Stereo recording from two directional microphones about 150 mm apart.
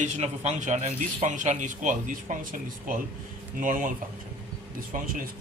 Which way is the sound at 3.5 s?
60° right (ahead or behind).